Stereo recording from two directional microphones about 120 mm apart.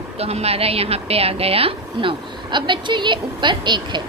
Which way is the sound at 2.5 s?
40° right (ahead or behind).